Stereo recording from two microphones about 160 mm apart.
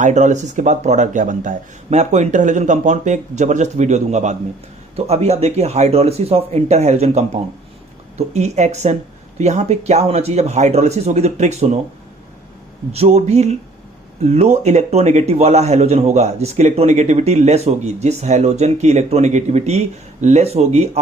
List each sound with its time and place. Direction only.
0.0 s a man's voice: 50° right (ahead or behind)
12.9 s a man's voice: 40° right (ahead or behind)